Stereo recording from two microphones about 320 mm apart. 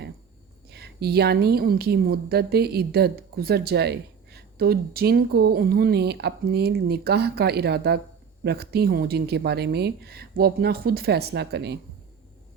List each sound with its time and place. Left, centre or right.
0.7 s a woman's voice: right